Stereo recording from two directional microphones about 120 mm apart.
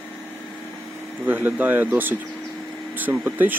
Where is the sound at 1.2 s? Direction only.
15° right (ahead or behind).